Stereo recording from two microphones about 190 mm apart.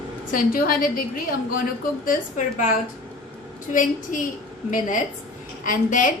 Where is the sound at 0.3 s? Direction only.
45° left (ahead or behind).